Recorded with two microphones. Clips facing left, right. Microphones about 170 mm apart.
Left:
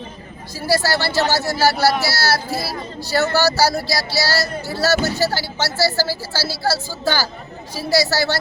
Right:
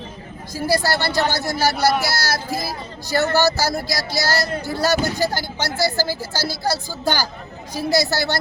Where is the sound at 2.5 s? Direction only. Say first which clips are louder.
Left 1 dB; 15° right (ahead or behind).